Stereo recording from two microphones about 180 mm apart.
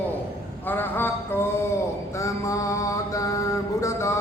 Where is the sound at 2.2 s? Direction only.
15° left (ahead or behind).